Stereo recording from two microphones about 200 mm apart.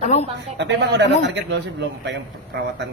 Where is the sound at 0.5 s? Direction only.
60° right (ahead or behind).